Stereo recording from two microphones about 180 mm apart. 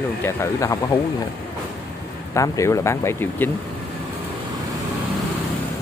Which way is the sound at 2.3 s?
15° left (ahead or behind).